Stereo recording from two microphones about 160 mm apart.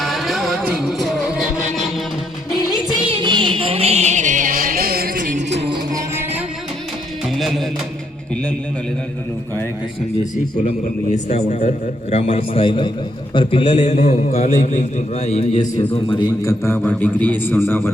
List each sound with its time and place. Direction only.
0.0 s music: centre (ahead or behind)
3.1 s music: 30° right (ahead or behind); by 5.6 s 75° right (ahead or behind)
5.6 s music: 30° right (ahead or behind)
7.3 s music: centre (ahead or behind)
10.8 s a man's voice: 45° left (ahead or behind)
16.4 s speech: 20° left (ahead or behind)